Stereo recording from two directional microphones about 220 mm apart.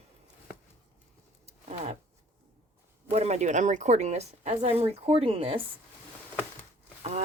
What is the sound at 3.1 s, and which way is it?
Speech, 30° right (ahead or behind).